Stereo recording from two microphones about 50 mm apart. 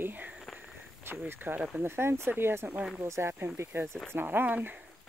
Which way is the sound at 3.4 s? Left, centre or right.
Right.